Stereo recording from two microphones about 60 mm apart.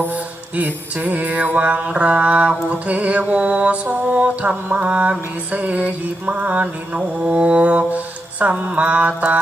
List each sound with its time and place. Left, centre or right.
0.5 s mantra: right